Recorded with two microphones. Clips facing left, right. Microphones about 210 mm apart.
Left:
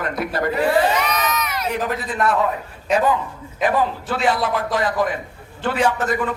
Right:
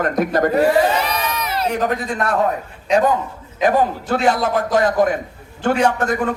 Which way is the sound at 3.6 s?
45° right (ahead or behind).